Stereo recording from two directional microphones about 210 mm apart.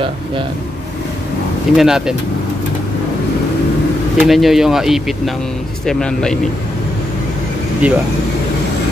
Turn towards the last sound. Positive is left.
turn(degrees=-5)  # may be behind; listen again after turning